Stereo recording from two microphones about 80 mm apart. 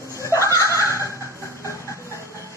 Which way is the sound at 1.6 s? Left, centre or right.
Left.